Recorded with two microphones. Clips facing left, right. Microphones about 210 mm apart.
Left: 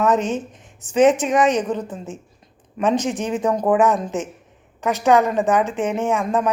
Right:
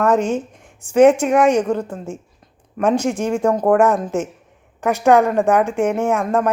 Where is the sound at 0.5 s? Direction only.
10° right (ahead or behind).